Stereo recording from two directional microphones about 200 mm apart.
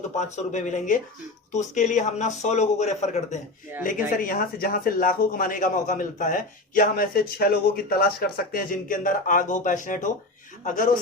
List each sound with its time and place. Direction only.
0.2 s a man's voice: 35° left (ahead or behind)
4.2 s a man's voice: 45° left (ahead or behind)